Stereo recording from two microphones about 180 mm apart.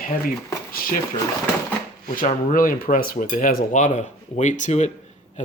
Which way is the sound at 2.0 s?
50° left (ahead or behind).